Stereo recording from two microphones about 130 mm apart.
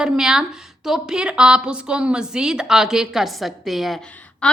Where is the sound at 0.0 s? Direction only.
5° right (ahead or behind).